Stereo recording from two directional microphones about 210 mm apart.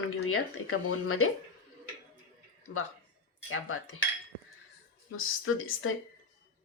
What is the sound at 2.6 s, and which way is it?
Speech, 90° left.